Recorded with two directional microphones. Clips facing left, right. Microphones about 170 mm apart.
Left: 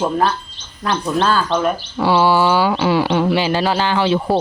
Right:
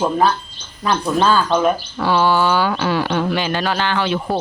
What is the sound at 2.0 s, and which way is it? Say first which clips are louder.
Speech: left 3 dB; 15° left (ahead or behind).